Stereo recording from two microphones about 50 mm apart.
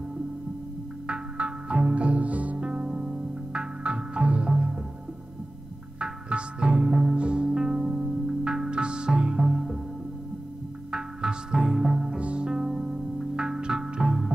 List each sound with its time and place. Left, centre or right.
1.0 s music: right
5.9 s music: centre
9.5 s music: centre
10.9 s music: centre